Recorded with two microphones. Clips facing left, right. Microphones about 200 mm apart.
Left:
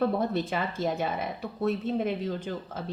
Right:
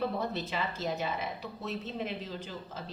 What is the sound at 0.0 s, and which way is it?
Speech, 50° left (ahead or behind).